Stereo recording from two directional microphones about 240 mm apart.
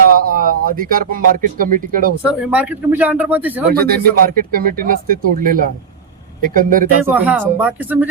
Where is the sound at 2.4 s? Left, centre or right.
Centre.